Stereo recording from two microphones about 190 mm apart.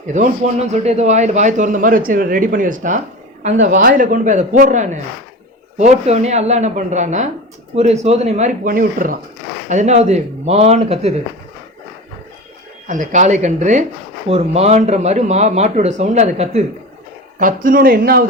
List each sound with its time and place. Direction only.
0.4 s a man's voice: 35° right (ahead or behind)
12.9 s speech: 40° right (ahead or behind)
17.4 s a man's voice: 45° right (ahead or behind)